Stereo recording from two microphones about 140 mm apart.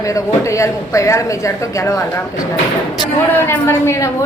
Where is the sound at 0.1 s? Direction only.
20° left (ahead or behind).